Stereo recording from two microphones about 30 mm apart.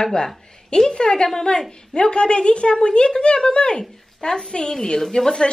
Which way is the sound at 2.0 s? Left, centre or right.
Left.